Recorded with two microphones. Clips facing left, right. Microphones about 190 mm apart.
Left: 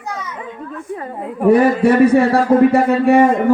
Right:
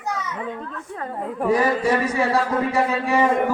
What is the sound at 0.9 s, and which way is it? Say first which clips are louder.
Speech: left 1 dB; 5° left (ahead or behind).